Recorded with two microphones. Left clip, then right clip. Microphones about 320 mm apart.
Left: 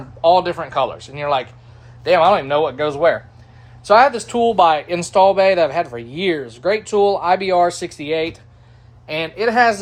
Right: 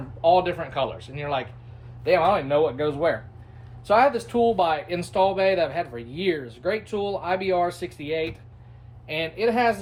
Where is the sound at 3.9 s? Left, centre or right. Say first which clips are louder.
Left 7 dB; left.